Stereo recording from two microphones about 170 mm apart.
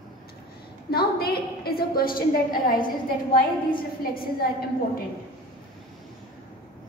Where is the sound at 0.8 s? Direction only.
65° left (ahead or behind).